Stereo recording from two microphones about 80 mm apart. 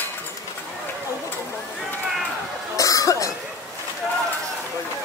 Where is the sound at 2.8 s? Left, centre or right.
Left.